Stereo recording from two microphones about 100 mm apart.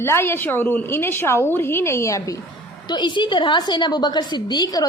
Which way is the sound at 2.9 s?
50° left (ahead or behind).